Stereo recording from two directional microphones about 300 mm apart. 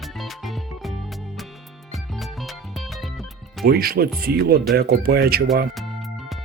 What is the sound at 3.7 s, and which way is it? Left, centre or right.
Speech, right.